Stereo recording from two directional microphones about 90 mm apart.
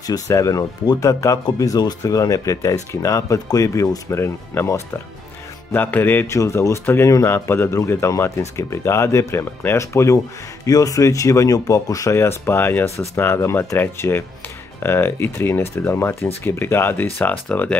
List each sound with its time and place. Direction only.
0.0 s speech: 40° left (ahead or behind); by 6.3 s 20° left (ahead or behind)
6.3 s speech: 35° left (ahead or behind); by 17.7 s 15° left (ahead or behind)